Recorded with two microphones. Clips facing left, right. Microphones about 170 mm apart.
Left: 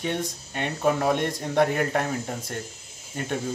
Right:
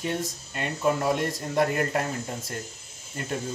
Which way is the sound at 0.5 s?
60° left (ahead or behind).